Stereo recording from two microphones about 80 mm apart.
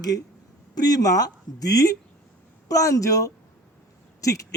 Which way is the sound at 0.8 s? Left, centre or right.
Left.